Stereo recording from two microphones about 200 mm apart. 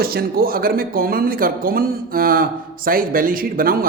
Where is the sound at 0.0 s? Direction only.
50° right (ahead or behind).